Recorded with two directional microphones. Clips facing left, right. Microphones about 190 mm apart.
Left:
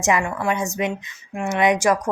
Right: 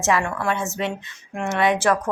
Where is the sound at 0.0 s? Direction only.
15° left (ahead or behind).